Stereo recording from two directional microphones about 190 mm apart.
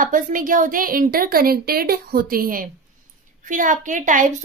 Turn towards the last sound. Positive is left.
turn(degrees=-40)  # may be behind; listen again after turning